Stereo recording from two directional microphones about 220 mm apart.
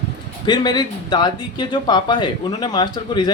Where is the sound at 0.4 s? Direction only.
20° left (ahead or behind).